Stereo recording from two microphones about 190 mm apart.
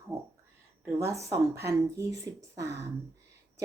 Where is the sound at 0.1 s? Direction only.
15° right (ahead or behind).